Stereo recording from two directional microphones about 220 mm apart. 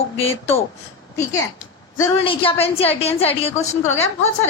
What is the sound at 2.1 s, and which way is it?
A woman's voice, 25° left (ahead or behind).